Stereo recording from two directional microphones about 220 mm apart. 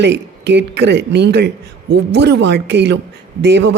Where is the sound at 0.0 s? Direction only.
50° right (ahead or behind).